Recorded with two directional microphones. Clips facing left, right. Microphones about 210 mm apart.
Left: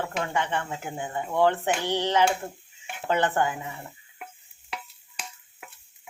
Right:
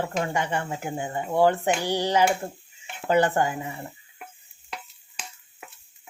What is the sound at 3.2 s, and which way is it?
Speech, 40° right (ahead or behind).